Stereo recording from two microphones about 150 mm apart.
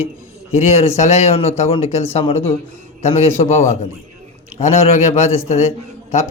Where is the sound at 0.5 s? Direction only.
45° left (ahead or behind).